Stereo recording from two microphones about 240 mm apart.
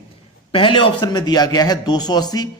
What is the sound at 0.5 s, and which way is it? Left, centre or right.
Speech, left.